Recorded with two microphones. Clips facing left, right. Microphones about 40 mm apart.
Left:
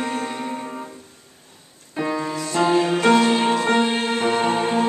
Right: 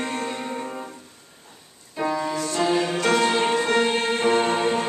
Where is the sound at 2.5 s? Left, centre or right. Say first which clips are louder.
Left 5 dB; centre.